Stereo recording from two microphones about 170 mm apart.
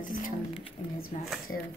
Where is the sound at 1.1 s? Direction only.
45° left (ahead or behind).